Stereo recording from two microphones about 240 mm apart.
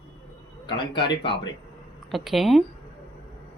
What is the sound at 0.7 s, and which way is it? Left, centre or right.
Speech, centre.